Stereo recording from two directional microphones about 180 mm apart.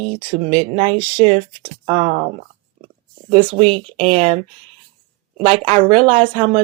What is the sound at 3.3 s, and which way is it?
Speech, 30° right (ahead or behind).